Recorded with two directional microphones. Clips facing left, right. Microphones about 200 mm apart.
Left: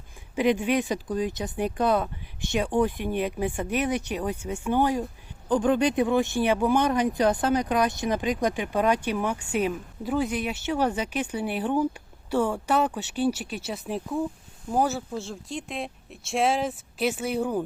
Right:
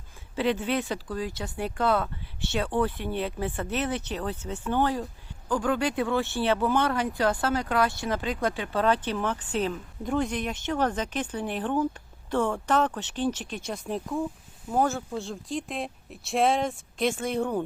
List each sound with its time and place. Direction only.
0.3 s speech: 15° left (ahead or behind)